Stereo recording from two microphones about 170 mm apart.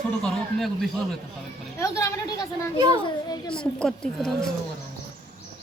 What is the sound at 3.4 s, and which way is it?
Speech, 5° left (ahead or behind).